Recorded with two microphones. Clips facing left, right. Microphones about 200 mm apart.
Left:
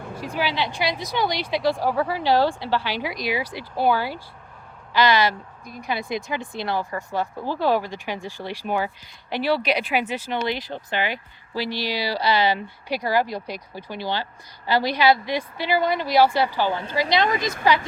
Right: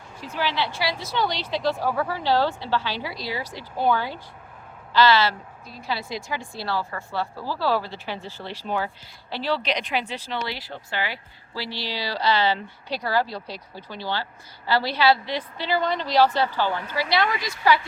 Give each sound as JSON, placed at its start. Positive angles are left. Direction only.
{"t": 0.2, "sound": "speech", "side_deg": 15}
{"t": 17.2, "sound": "speech", "side_deg": 45}